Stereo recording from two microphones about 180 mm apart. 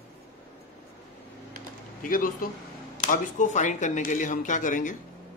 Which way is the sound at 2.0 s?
50° left (ahead or behind).